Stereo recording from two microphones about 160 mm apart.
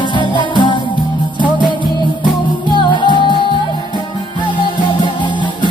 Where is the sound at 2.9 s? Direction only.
30° left (ahead or behind).